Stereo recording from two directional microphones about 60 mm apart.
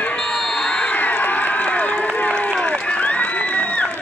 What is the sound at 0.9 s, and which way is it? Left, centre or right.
Run, left.